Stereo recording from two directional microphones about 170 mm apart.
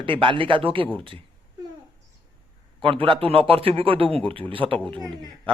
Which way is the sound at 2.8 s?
30° right (ahead or behind).